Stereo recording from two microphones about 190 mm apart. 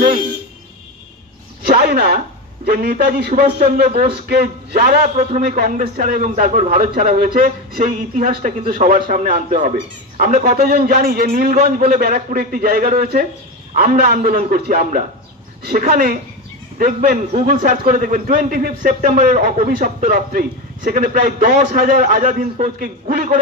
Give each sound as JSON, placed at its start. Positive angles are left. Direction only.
{"t": 1.8, "sound": "a sound", "side_deg": -55}
{"t": 2.1, "sound": "speech", "side_deg": -55}
{"t": 3.8, "sound": "speech", "side_deg": -40}
{"t": 4.1, "sound": "a man's voice", "side_deg": -55}
{"t": 5.0, "sound": "a man's voice", "side_deg": -40}